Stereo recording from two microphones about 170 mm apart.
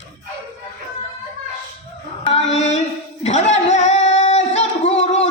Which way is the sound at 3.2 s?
40° left (ahead or behind).